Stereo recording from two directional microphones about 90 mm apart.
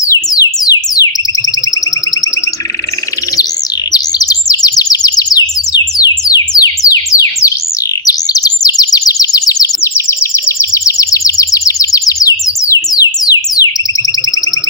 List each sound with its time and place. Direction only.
0.0 s music: 45° left (ahead or behind)
3.9 s chirp: 45° left (ahead or behind)
9.9 s a sound: 30° left (ahead or behind); by 13.7 s 45° left (ahead or behind)